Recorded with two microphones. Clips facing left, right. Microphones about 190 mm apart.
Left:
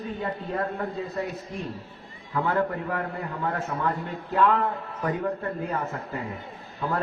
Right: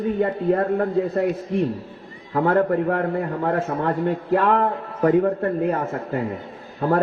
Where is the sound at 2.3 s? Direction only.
55° right (ahead or behind).